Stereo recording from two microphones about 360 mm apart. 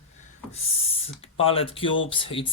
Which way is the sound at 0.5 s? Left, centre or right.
Centre.